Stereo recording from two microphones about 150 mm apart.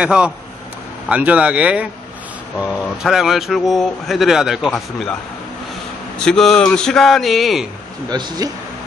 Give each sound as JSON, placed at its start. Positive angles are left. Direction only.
{"t": 0.0, "sound": "speech", "side_deg": -5}
{"t": 6.1, "sound": "speech", "side_deg": 5}
{"t": 8.1, "sound": "speech", "side_deg": -25}